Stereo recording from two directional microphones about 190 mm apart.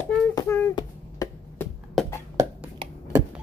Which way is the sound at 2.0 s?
Centre (ahead or behind).